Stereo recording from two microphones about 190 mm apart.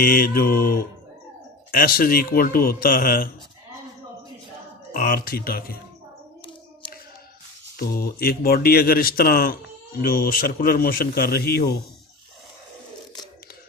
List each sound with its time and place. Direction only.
0.0 s a man's voice: 50° left (ahead or behind)
4.9 s a man's voice: 50° left (ahead or behind)
7.8 s a man's voice: 50° left (ahead or behind)